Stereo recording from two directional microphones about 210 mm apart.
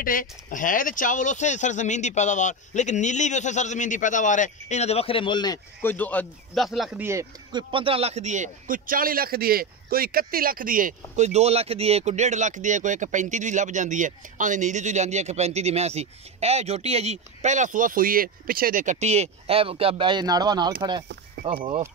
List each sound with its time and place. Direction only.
0.0 s speech: 40° left (ahead or behind); by 7.6 s 15° right (ahead or behind)
7.7 s a man's voice: 25° right (ahead or behind)
21.4 s a sound: 45° right (ahead or behind)